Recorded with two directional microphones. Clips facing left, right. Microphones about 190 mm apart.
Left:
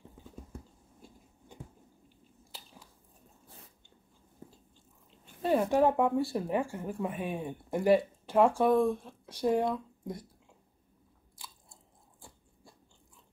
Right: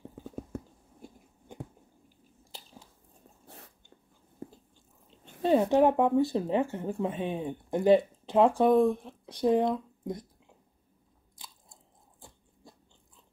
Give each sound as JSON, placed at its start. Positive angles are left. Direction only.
{"t": 0.2, "sound": "a sound", "side_deg": -65}
{"t": 3.4, "sound": "biting", "side_deg": -75}
{"t": 5.2, "sound": "speech", "side_deg": -25}
{"t": 11.3, "sound": "biting", "side_deg": -20}